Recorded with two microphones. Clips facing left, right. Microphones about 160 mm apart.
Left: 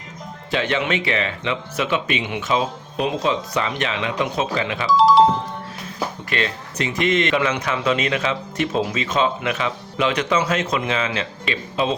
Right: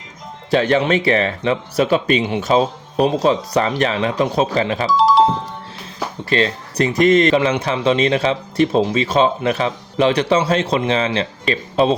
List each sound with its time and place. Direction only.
0.5 s a man's voice: 40° right (ahead or behind)
4.9 s music: centre (ahead or behind)
6.3 s a man's voice: 35° right (ahead or behind)